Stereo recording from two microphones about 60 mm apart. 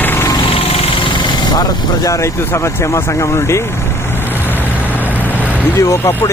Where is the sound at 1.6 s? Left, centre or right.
Left.